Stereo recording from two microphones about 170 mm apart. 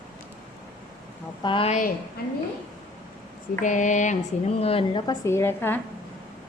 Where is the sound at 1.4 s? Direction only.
30° left (ahead or behind).